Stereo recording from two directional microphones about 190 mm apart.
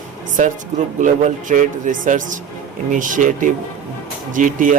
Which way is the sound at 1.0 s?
40° right (ahead or behind).